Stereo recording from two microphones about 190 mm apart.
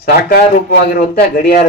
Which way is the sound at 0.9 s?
50° left (ahead or behind).